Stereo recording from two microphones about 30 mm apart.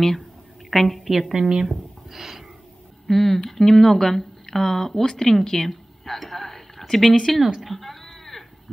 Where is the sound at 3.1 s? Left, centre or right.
Centre.